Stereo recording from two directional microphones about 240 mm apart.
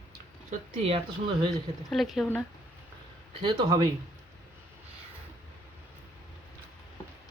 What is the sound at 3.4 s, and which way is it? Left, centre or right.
Speech, centre.